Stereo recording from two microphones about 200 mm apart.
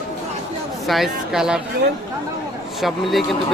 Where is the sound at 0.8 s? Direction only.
Centre (ahead or behind).